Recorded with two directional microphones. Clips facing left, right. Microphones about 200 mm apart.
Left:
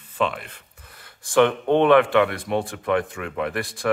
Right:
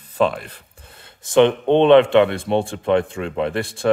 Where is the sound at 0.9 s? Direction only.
25° right (ahead or behind).